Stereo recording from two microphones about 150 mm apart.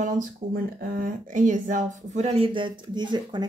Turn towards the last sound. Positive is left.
turn(degrees=-30)  # may be behind; listen again after turning